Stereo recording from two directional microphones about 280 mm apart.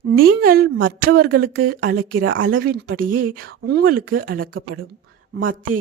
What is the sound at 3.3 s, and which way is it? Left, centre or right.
A woman's voice, right.